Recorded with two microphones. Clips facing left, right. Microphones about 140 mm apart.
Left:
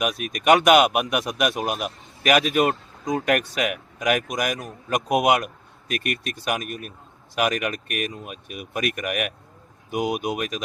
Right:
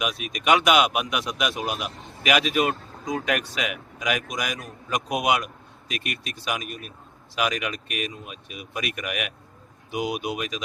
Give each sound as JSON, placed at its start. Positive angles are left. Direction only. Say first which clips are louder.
{"t": 0.2, "sound": "a man's voice", "louder": "left 4 dB", "side_deg": 50}